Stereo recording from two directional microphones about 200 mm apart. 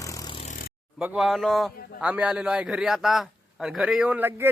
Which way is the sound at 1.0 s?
5° right (ahead or behind).